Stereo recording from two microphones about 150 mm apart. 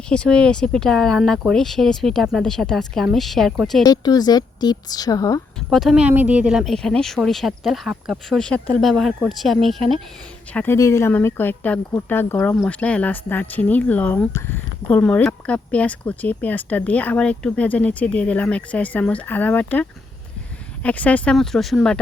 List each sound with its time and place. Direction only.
0.1 s speech: 5° left (ahead or behind)
3.8 s a woman's voice: 25° left (ahead or behind)
5.5 s speech: centre (ahead or behind)
10.5 s speech: 15° left (ahead or behind)